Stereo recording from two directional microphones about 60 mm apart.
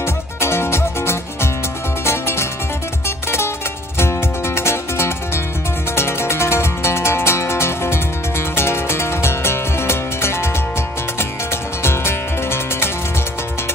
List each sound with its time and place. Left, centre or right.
0.0 s music: left
4.6 s music: left
11.8 s music: left